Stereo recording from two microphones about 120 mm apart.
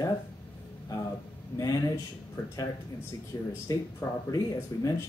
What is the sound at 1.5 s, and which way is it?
Speech, 30° left (ahead or behind).